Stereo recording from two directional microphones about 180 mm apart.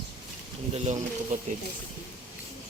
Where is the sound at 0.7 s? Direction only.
40° right (ahead or behind).